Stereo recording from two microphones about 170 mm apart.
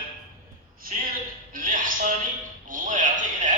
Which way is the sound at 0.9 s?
50° right (ahead or behind).